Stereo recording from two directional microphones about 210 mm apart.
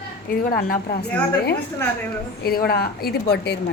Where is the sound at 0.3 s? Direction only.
45° left (ahead or behind).